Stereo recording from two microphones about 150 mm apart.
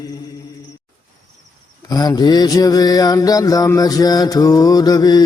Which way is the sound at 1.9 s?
25° left (ahead or behind).